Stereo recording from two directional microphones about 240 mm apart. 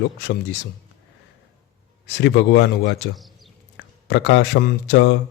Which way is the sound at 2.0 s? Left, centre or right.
Left.